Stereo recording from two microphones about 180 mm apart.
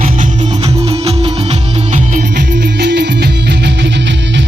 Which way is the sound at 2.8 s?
70° right (ahead or behind).